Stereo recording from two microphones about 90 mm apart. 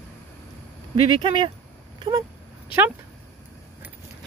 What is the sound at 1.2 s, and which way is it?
Speech, 65° right (ahead or behind).